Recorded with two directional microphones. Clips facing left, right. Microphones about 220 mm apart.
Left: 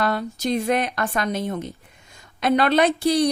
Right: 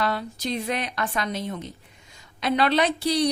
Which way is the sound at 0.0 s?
50° left (ahead or behind).